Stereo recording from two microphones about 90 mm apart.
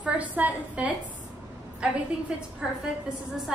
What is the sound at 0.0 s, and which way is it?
Speech, 15° right (ahead or behind).